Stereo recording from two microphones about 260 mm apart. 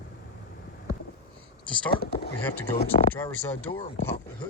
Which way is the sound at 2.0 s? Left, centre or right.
Left.